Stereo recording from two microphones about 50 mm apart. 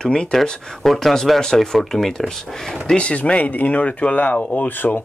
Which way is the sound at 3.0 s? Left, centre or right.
Left.